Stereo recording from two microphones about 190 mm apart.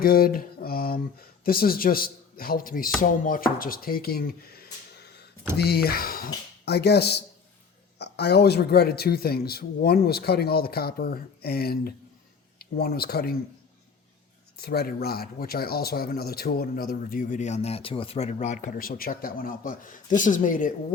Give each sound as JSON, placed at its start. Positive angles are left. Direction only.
{"t": 0.0, "sound": "speech", "side_deg": 50}
{"t": 14.5, "sound": "speech", "side_deg": 55}